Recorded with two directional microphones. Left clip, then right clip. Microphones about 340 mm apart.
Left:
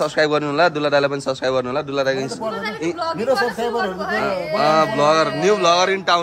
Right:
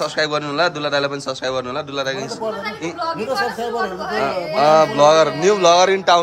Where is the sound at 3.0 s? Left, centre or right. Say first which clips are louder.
Left 2 dB; left.